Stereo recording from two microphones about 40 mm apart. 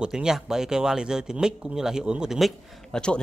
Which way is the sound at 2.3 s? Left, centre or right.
Centre.